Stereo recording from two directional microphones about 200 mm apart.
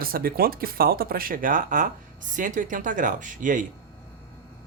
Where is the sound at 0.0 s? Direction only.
45° right (ahead or behind).